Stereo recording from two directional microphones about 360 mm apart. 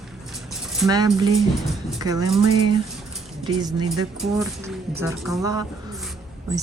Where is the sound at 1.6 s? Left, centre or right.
Centre.